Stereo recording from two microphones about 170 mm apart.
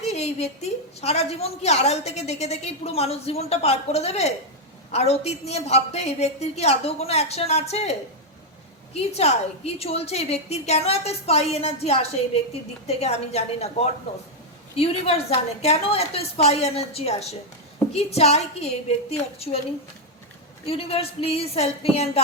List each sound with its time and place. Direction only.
0.0 s a woman's voice: 40° left (ahead or behind)
20.7 s a woman's voice: 35° left (ahead or behind)